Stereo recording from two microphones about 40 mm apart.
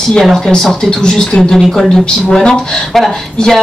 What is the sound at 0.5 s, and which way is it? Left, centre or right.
Speech, centre.